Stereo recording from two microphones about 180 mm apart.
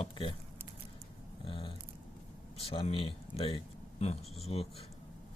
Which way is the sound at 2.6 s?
30° left (ahead or behind).